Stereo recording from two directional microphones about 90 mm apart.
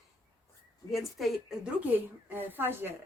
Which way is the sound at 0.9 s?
Centre (ahead or behind).